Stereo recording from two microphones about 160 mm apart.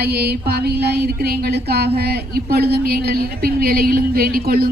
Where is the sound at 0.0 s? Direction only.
90° right.